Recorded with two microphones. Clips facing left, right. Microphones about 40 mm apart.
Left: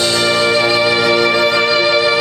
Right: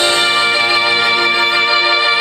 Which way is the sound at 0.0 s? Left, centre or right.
Right.